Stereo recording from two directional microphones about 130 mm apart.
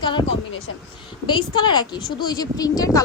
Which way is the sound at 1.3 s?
35° left (ahead or behind).